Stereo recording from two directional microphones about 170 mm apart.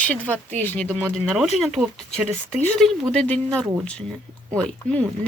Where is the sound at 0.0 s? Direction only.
5° left (ahead or behind).